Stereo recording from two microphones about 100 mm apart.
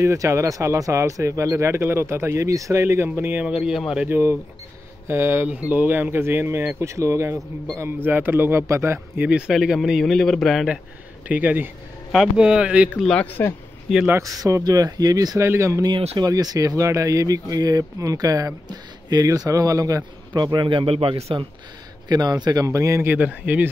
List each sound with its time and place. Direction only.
0.0 s speech: 30° right (ahead or behind)
3.4 s speech: 5° right (ahead or behind)
4.1 s speech: 25° right (ahead or behind)
9.5 s speech: 5° right (ahead or behind)
11.2 s speech: 15° right (ahead or behind)
12.1 s speech: 5° right (ahead or behind)
13.0 s speech: 10° left (ahead or behind)
13.9 s speech: centre (ahead or behind)
14.2 s speech: 35° right (ahead or behind)
20.3 s speech: 45° right (ahead or behind); by 21.2 s 65° right (ahead or behind)
22.0 s speech: 40° right (ahead or behind)
23.0 s speech: 15° right (ahead or behind)